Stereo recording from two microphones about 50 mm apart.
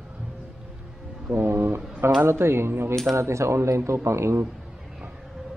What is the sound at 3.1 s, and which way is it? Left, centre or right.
A man's voice, right.